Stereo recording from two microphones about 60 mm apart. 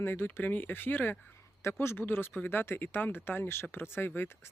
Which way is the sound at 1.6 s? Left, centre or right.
Left.